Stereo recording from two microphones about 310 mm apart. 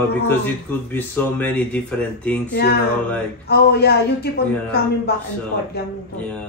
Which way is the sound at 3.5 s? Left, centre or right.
Left.